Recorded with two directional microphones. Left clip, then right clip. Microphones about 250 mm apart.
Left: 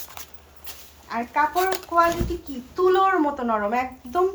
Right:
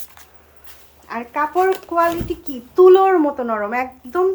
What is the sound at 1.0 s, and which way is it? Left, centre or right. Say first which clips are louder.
A woman's voice: right 1 dB; centre.